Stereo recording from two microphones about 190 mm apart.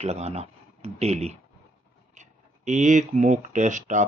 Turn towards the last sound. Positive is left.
turn(degrees=-40)  # may be behind; listen again after turning